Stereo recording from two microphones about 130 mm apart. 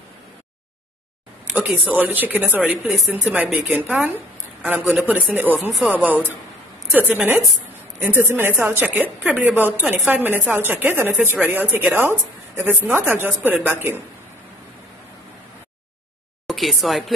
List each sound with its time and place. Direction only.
1.9 s a woman's voice: 15° right (ahead or behind)
3.7 s a woman's voice: 15° right (ahead or behind)
5.7 s a woman's voice: centre (ahead or behind); by 14.0 s 15° right (ahead or behind)
16.4 s speech: centre (ahead or behind)